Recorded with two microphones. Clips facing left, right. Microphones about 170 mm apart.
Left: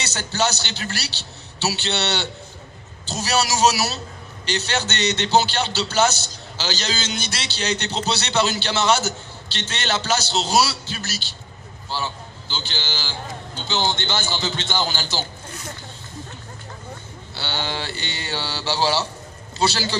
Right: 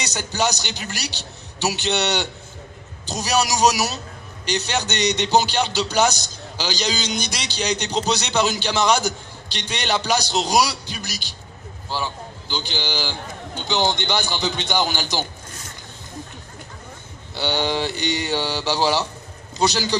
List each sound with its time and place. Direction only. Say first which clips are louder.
0.0 s speech: even; 15° right (ahead or behind)
12.5 s speech: right 4 dB; 15° right (ahead or behind)
17.3 s speech: right 6 dB; 15° right (ahead or behind)